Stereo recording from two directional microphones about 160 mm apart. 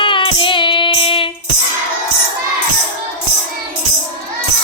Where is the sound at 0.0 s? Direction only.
30° left (ahead or behind).